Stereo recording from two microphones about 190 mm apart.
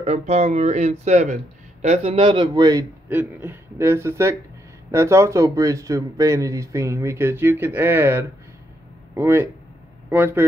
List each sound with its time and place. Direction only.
0.0 s speech: 35° right (ahead or behind); by 10.4 s 10° right (ahead or behind)